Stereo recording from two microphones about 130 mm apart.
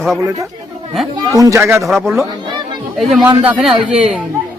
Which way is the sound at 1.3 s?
25° right (ahead or behind).